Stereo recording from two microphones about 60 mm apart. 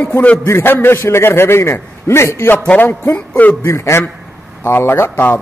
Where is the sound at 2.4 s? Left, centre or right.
Left.